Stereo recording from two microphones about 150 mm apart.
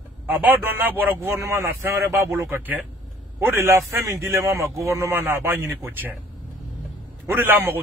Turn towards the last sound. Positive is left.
turn(degrees=-15)  # may be behind; listen again after turning